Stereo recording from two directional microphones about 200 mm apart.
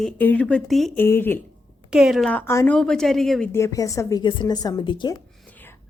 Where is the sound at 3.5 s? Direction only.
15° left (ahead or behind).